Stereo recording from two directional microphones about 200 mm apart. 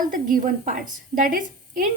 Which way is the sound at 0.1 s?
45° right (ahead or behind).